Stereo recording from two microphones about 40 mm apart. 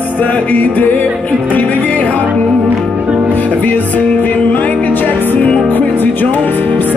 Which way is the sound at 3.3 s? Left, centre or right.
Left.